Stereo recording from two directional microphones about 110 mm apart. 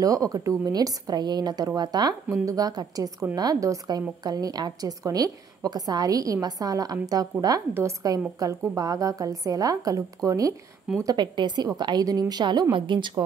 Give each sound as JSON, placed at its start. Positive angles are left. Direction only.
{"t": 0.0, "sound": "a woman's voice", "side_deg": -30}
{"t": 11.1, "sound": "a woman's voice", "side_deg": -45}